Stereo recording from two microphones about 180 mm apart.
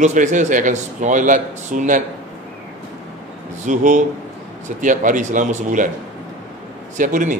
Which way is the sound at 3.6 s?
45° right (ahead or behind).